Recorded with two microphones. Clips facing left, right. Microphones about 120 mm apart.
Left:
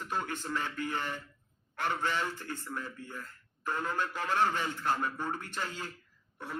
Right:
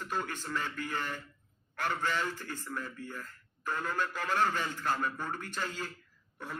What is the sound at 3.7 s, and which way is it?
A man's voice, 20° left (ahead or behind).